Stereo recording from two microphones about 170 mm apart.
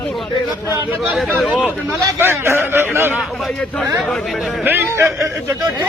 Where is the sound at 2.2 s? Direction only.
15° right (ahead or behind).